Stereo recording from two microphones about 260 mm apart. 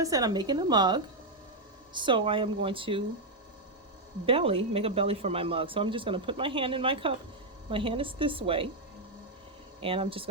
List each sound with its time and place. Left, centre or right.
0.0 s a woman's voice: centre
4.3 s speech: right
9.8 s speech: right